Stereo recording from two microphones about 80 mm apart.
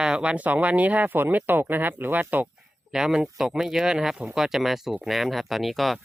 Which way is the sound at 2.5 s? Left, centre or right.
Centre.